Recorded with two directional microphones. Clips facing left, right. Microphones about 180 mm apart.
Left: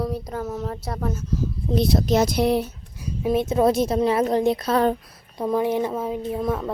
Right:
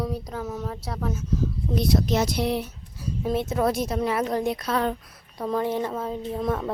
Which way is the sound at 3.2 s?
15° left (ahead or behind).